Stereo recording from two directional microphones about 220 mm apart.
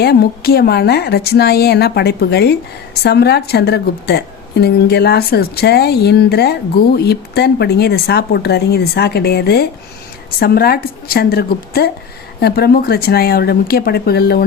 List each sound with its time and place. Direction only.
0.0 s speech: 45° left (ahead or behind)